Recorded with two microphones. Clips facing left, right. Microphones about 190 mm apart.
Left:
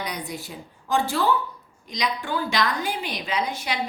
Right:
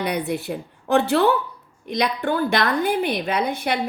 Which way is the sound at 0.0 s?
60° right (ahead or behind).